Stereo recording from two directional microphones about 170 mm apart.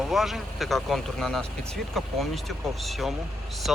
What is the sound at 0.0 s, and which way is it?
Speech, centre (ahead or behind).